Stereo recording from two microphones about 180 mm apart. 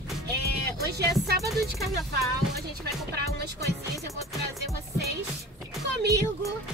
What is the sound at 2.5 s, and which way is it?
Speech, 60° right (ahead or behind).